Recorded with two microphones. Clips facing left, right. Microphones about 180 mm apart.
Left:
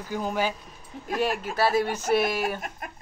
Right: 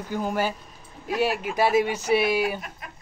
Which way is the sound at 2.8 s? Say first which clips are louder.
Left 3 dB; 45° left (ahead or behind).